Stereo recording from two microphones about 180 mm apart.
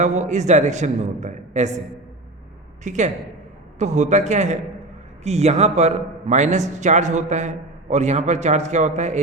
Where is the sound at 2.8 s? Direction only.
40° right (ahead or behind).